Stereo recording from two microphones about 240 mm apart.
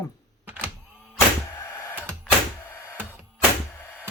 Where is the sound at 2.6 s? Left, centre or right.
Centre.